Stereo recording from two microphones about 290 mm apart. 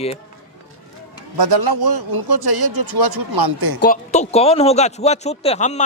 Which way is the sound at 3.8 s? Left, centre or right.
Left.